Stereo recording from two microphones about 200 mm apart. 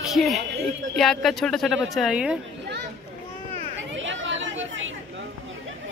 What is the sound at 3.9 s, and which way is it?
Chatter, 70° right (ahead or behind).